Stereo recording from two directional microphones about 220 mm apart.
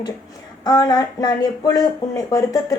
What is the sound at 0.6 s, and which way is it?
Speech, 20° left (ahead or behind).